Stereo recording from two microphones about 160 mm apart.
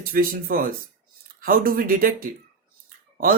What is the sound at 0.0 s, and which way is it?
Speech, 65° right (ahead or behind).